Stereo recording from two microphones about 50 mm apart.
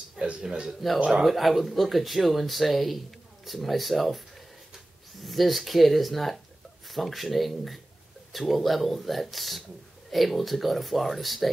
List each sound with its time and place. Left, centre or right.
0.2 s a man's voice: right
0.7 s speech: centre
5.2 s speech: centre